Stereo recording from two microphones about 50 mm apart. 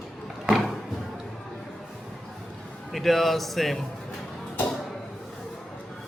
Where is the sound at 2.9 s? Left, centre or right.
Centre.